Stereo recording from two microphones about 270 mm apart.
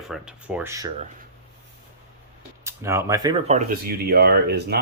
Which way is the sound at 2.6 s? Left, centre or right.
Centre.